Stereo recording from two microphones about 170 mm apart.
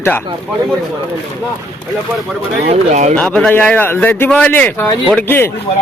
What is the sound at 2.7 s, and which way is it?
Speech, 45° right (ahead or behind).